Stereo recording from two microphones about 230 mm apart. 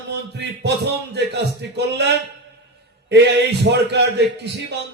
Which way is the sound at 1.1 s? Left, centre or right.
Right.